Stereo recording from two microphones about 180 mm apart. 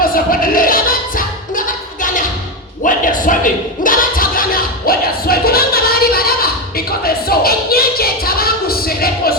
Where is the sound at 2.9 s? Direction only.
50° left (ahead or behind).